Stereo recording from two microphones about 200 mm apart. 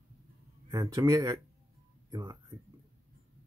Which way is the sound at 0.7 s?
20° right (ahead or behind).